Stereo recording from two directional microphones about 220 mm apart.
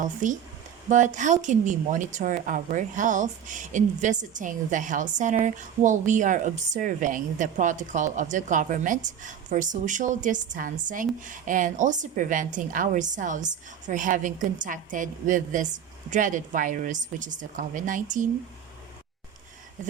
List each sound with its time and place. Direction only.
0.0 s a woman's voice: 35° right (ahead or behind)